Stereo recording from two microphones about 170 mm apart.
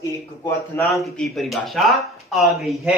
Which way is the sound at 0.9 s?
Centre (ahead or behind).